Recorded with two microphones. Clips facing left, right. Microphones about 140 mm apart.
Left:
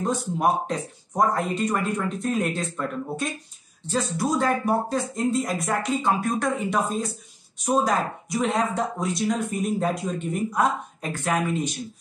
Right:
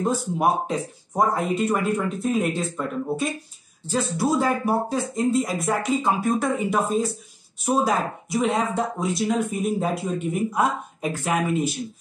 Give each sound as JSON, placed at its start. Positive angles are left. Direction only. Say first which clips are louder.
{"t": 0.0, "sound": "speech", "louder": "right 1 dB", "side_deg": -5}
{"t": 3.9, "sound": "speech", "louder": "right 2 dB", "side_deg": -5}